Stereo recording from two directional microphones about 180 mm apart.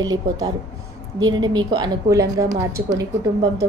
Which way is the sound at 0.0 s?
20° right (ahead or behind).